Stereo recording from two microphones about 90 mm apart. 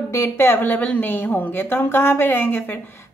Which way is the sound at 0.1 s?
30° left (ahead or behind).